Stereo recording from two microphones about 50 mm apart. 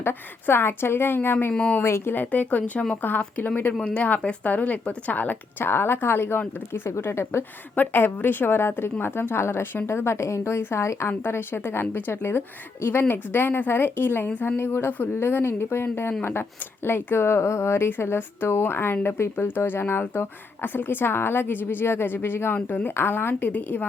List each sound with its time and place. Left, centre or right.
0.0 s speech: left
2.1 s a woman's voice: left
5.6 s a woman's voice: left
7.8 s a woman's voice: left
10.6 s speech: left
22.5 s a woman's voice: left
23.0 s speech: left
23.5 s a woman's voice: left